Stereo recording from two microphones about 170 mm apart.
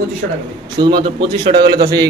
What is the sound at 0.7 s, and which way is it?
A man's voice, 25° right (ahead or behind).